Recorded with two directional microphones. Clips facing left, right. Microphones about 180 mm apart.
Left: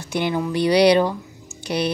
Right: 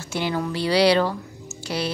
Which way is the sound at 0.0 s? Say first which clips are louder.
Left 3 dB; 15° left (ahead or behind).